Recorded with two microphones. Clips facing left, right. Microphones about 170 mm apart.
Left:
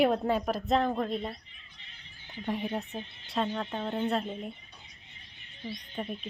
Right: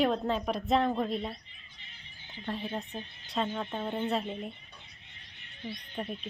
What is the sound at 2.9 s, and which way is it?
Speech, centre (ahead or behind).